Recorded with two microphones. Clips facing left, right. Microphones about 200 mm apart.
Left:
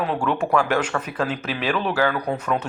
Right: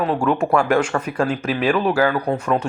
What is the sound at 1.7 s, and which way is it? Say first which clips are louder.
Speech: right 5 dB; 40° right (ahead or behind).